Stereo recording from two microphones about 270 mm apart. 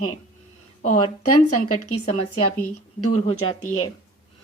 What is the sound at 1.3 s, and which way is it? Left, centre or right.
Speech, left.